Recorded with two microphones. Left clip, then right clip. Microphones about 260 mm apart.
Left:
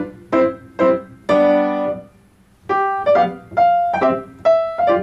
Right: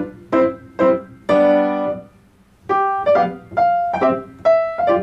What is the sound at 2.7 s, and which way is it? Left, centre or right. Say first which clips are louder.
Piano: even; centre.